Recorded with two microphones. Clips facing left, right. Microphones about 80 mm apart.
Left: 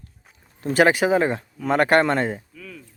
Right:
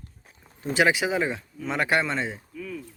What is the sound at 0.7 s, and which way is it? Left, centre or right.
Speech, left.